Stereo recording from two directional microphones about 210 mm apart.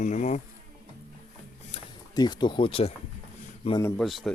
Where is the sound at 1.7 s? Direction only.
20° left (ahead or behind).